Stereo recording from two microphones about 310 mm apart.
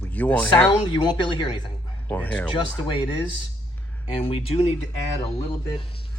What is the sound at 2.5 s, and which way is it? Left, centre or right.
Speech, centre.